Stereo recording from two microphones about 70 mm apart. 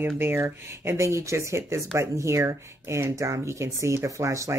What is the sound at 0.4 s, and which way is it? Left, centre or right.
Speech, right.